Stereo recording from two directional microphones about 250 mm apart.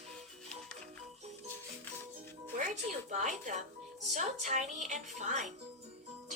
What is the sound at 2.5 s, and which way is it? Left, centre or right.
A woman's voice, right.